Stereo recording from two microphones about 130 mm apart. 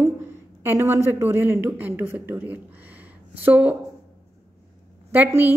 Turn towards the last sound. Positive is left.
turn(degrees=-15)  # may be behind; listen again after turning